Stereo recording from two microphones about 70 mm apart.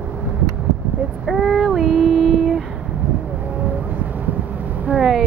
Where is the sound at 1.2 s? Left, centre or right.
Centre.